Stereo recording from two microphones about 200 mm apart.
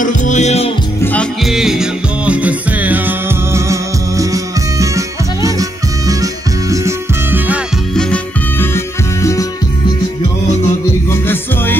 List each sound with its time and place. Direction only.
0.0 s music: 40° left (ahead or behind)
1.0 s music: 5° left (ahead or behind)
8.1 s music: 10° left (ahead or behind)
11.1 s music: 10° left (ahead or behind)